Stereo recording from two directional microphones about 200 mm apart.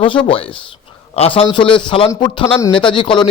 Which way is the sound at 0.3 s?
25° left (ahead or behind).